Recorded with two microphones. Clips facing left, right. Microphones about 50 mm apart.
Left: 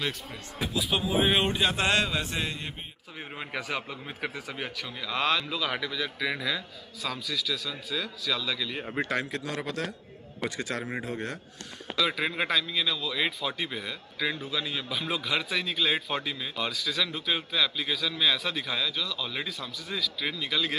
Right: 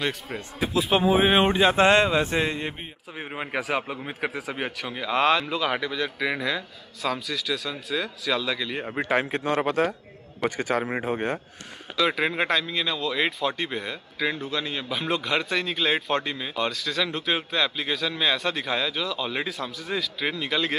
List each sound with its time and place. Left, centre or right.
0.7 s speech: right
3.2 s a man's voice: centre
4.3 s a man's voice: centre
4.8 s speech: right
5.1 s a man's voice: centre
9.1 s a man's voice: right
10.6 s speech: right
12.1 s a man's voice: centre